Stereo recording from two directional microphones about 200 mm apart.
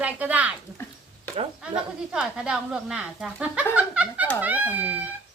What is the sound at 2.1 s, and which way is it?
Speech, 5° right (ahead or behind).